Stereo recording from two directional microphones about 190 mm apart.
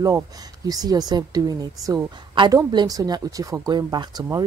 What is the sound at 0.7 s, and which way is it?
Speech, 20° right (ahead or behind).